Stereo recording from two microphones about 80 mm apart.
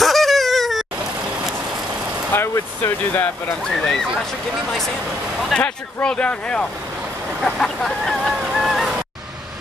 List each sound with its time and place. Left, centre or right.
0.0 s a sound: centre
2.3 s speech: left
3.6 s speech: centre
5.5 s speech: centre
7.4 s honk: centre